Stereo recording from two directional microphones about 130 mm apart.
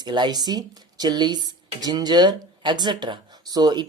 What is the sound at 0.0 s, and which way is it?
Speech, 35° right (ahead or behind).